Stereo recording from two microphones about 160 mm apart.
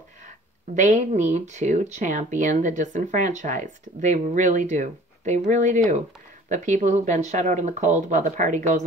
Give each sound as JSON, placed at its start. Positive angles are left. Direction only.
{"t": 0.7, "sound": "speech", "side_deg": -50}